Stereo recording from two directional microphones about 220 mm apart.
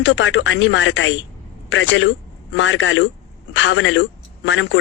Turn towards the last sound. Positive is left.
turn(degrees=60)  # may be behind; listen again after turning